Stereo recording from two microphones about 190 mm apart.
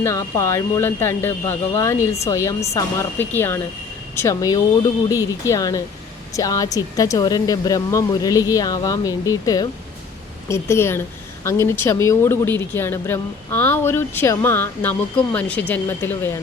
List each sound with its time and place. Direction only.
0.0 s a woman's voice: 15° left (ahead or behind)